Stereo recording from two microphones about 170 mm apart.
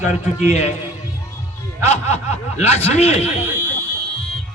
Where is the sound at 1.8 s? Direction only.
40° left (ahead or behind).